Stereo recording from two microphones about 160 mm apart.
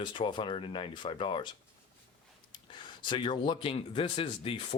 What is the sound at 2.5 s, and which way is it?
Speech, 30° left (ahead or behind).